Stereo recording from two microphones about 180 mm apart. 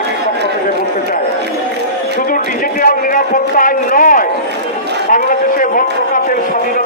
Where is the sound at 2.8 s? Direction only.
50° left (ahead or behind).